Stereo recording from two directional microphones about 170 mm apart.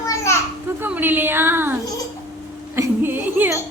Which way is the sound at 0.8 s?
10° right (ahead or behind).